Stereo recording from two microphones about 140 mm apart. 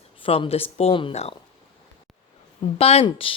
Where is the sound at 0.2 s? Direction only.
40° left (ahead or behind).